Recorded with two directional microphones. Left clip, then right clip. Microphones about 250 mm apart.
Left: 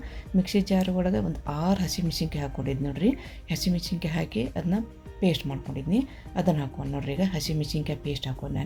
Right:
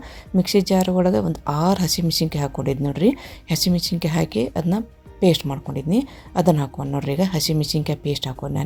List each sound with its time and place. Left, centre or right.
0.3 s speech: right